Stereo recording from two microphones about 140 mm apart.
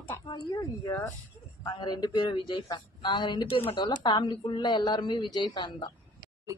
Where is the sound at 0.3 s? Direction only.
25° left (ahead or behind).